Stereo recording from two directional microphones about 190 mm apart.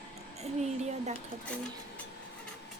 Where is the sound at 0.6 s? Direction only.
35° right (ahead or behind).